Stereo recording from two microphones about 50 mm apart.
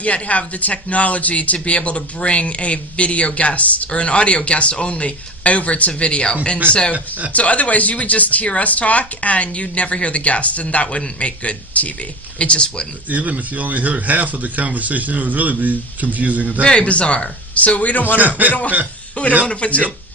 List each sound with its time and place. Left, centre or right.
0.0 s speech: left
7.3 s speech: left
13.1 s speech: right
16.6 s speech: left
18.4 s speech: right
19.5 s speech: left